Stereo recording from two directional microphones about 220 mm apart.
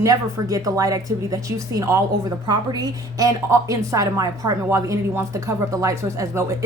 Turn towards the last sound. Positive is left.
turn(degrees=-15)  # may be behind; listen again after turning